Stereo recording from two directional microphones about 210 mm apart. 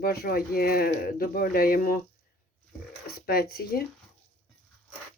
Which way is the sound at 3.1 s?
45° left (ahead or behind).